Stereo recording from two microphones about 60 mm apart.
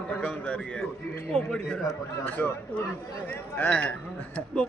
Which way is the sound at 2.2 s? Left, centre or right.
Left.